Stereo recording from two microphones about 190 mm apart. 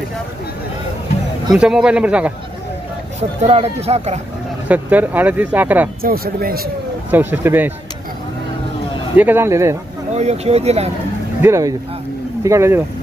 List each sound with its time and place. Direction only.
1.5 s speech: 5° right (ahead or behind)
3.2 s speech: 35° right (ahead or behind)
4.6 s speech: 10° right (ahead or behind)
6.0 s speech: 50° right (ahead or behind)
7.1 s speech: 10° right (ahead or behind)
9.1 s speech: 10° right (ahead or behind)
10.1 s speech: 35° right (ahead or behind)
11.4 s speech: 15° right (ahead or behind)